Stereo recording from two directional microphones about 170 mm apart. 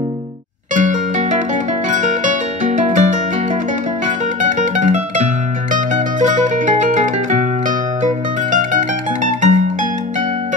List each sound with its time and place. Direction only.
0.7 s music: 45° right (ahead or behind)
4.4 s music: 45° right (ahead or behind)